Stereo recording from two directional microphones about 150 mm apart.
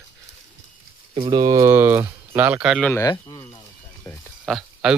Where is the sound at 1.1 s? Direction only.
30° right (ahead or behind); by 2.8 s 5° right (ahead or behind).